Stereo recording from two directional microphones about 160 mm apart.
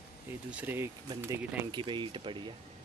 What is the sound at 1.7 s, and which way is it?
Speech, 30° right (ahead or behind).